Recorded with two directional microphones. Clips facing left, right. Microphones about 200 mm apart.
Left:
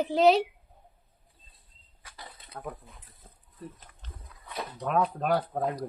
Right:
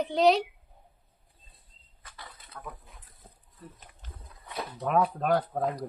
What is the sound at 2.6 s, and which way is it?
Speech, 40° left (ahead or behind).